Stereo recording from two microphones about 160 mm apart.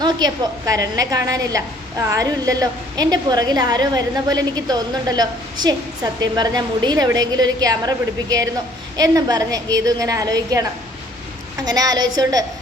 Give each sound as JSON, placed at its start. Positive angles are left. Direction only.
{"t": 0.0, "sound": "a woman's voice", "side_deg": -25}